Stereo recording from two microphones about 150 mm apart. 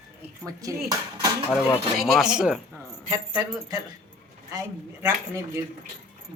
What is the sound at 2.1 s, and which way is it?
Speech, 5° right (ahead or behind).